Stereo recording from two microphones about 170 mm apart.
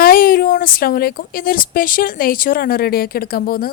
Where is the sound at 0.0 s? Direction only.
60° left (ahead or behind).